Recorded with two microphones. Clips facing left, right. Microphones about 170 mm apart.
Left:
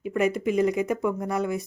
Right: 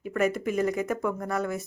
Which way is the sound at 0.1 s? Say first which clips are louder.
Left 2 dB; 15° left (ahead or behind).